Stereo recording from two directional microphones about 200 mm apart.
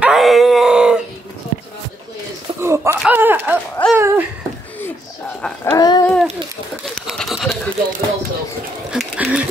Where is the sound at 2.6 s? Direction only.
10° right (ahead or behind).